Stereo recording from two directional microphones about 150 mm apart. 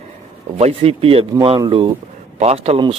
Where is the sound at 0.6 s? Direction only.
40° right (ahead or behind).